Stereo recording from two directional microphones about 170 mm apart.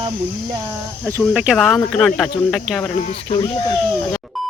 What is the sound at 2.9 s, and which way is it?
Speech, 45° left (ahead or behind).